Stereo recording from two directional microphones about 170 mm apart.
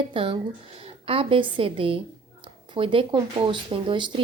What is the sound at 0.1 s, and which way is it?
A woman's voice, 30° right (ahead or behind).